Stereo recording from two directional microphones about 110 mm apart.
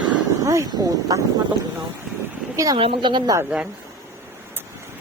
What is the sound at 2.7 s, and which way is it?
Speech, 50° right (ahead or behind).